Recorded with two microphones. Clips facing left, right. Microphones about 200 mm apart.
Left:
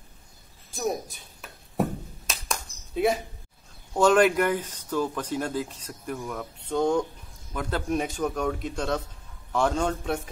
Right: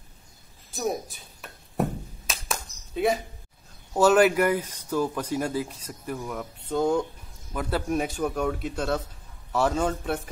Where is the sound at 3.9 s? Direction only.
5° right (ahead or behind).